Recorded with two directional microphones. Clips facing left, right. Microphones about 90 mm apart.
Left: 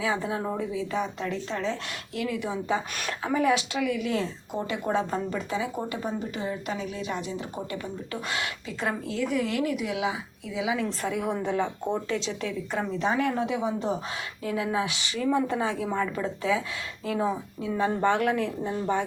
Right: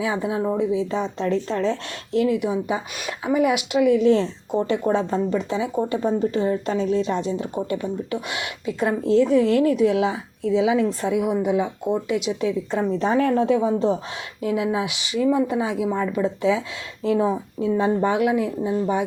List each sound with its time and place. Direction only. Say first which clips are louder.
0.0 s a woman's voice: right 5 dB; 20° right (ahead or behind); by 1.7 s 40° right (ahead or behind)
2.1 s a woman's voice: right 10 dB; 25° right (ahead or behind)
6.0 s a woman's voice: right 10 dB; 35° right (ahead or behind); by 12.5 s 15° right (ahead or behind)
12.7 s a woman's voice: right 5 dB; 35° right (ahead or behind)
14.4 s a woman's voice: right 5 dB; 20° right (ahead or behind)